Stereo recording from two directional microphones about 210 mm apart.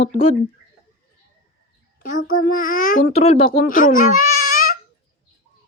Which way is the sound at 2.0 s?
40° left (ahead or behind).